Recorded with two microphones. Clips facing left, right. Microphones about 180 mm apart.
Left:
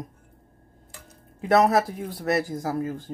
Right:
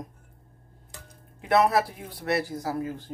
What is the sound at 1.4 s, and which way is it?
Speech, 45° left (ahead or behind).